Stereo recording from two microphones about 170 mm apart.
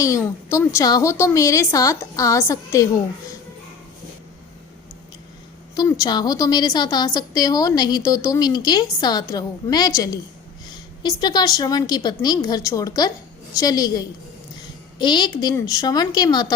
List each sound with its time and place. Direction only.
0.0 s a woman's voice: 15° left (ahead or behind)
5.7 s a woman's voice: 25° left (ahead or behind)